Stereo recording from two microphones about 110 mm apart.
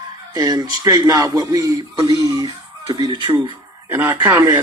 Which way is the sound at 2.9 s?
45° right (ahead or behind).